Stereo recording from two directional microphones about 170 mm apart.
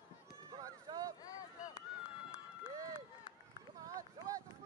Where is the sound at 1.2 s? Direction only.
20° left (ahead or behind).